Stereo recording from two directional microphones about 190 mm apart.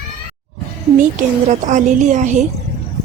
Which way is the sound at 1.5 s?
40° right (ahead or behind).